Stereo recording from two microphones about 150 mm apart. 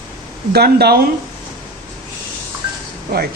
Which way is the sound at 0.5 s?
90° right.